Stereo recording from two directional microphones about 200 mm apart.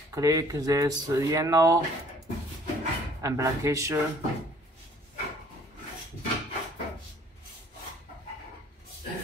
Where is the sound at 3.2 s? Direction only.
15° right (ahead or behind).